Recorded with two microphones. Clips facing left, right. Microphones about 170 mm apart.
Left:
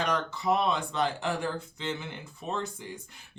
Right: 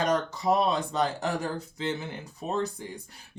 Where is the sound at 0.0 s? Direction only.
40° right (ahead or behind).